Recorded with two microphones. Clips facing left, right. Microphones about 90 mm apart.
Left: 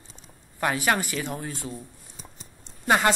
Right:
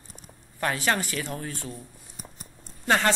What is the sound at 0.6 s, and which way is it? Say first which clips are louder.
Speech: left 2 dB; 15° left (ahead or behind).